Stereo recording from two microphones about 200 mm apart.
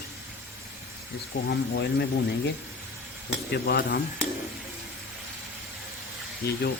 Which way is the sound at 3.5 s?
50° left (ahead or behind).